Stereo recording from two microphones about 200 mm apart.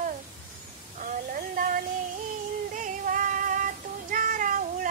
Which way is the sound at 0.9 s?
40° right (ahead or behind).